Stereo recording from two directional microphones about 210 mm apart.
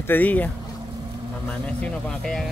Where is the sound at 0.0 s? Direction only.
10° left (ahead or behind).